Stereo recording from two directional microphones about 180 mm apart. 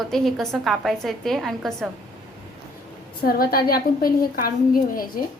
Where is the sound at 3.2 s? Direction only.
55° left (ahead or behind).